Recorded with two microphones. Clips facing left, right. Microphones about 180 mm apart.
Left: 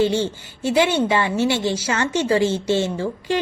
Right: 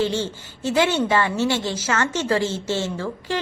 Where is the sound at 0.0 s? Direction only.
15° left (ahead or behind).